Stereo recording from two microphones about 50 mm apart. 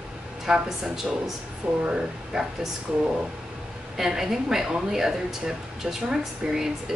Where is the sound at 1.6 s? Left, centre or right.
Right.